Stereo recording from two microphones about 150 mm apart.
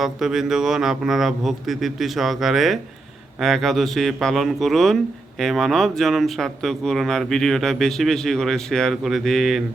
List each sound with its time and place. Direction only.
0.0 s speech: 5° right (ahead or behind)